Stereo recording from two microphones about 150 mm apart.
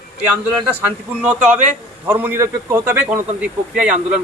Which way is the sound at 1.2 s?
10° right (ahead or behind).